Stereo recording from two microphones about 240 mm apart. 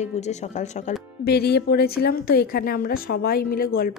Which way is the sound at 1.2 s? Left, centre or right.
Left.